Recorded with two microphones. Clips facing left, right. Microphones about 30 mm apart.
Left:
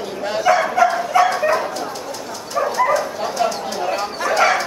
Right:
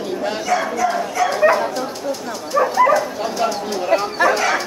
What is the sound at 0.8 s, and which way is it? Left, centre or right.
Bow-wow, left.